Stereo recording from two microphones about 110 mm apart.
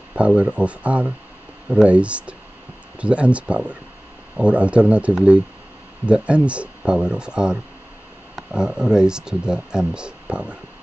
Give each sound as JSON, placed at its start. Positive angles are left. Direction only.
{"t": 0.1, "sound": "speech", "side_deg": -10}